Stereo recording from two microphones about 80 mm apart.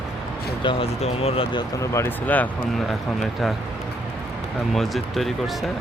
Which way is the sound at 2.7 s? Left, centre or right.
Centre.